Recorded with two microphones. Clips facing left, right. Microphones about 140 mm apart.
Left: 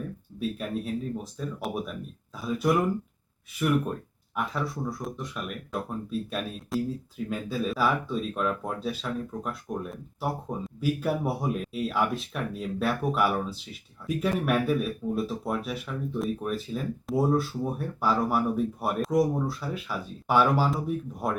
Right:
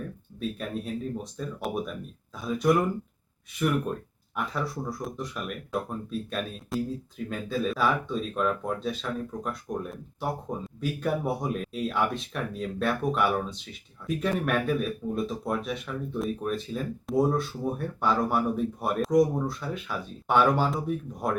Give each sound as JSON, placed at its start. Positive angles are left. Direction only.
{"t": 0.3, "sound": "speech", "side_deg": 0}
{"t": 4.4, "sound": "speech", "side_deg": 0}